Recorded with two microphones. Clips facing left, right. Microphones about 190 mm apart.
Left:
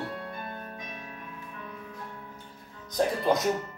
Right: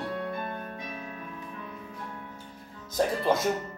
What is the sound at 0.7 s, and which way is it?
Music, 30° right (ahead or behind).